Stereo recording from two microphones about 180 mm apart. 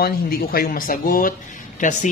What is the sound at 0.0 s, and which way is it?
A man's voice, 55° left (ahead or behind).